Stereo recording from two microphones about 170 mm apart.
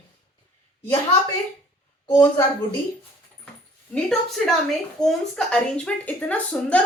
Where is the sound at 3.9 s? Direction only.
5° left (ahead or behind).